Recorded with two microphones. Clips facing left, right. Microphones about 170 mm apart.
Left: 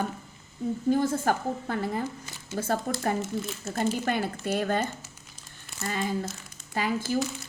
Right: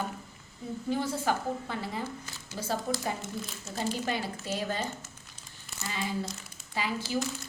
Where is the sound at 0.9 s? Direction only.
50° left (ahead or behind).